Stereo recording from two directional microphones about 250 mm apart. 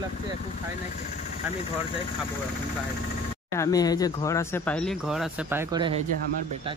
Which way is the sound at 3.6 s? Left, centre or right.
Centre.